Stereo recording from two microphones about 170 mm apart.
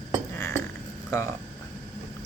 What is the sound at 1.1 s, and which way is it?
Speech, 20° left (ahead or behind).